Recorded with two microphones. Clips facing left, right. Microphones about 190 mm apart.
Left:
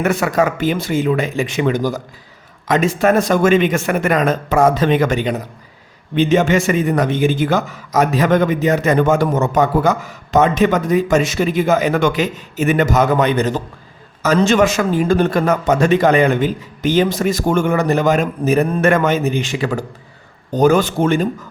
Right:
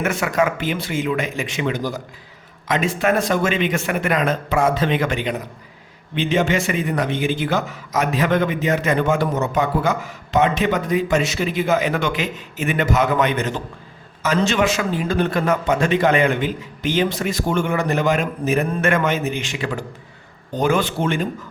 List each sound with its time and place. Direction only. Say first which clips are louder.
0.0 s a man's voice: left 4 dB; 40° left (ahead or behind)